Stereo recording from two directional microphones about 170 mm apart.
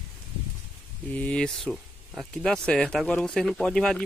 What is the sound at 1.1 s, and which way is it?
Speech, 5° left (ahead or behind).